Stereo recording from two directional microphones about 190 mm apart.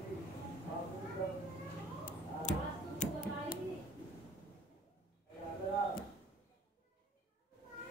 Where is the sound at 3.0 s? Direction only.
40° left (ahead or behind).